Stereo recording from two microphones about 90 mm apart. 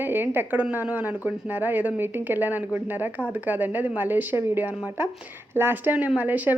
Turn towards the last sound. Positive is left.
turn(degrees=-20)  # may be behind; listen again after turning